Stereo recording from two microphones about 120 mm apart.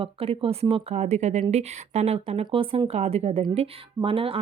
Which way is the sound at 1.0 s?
70° right (ahead or behind).